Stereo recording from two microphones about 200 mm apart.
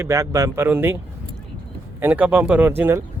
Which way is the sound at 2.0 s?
10° right (ahead or behind).